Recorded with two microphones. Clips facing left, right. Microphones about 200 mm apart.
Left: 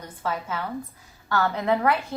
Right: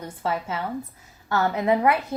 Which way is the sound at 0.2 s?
25° right (ahead or behind).